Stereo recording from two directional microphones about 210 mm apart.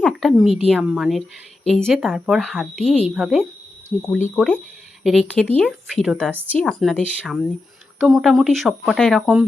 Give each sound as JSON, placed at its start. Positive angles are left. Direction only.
{"t": 0.0, "sound": "speech", "side_deg": 0}